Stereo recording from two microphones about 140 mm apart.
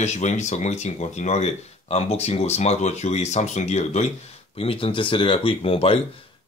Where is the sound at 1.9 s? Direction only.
45° left (ahead or behind).